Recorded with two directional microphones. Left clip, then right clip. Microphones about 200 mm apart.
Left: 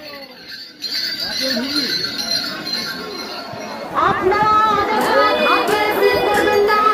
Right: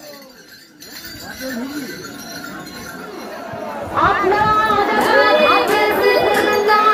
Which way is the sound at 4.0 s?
55° left (ahead or behind).